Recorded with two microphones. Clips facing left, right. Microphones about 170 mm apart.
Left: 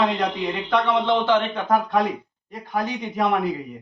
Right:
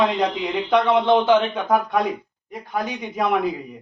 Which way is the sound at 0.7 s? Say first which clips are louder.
Right 4 dB; 20° right (ahead or behind).